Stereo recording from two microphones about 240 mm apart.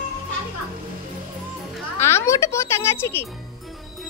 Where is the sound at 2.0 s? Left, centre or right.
Centre.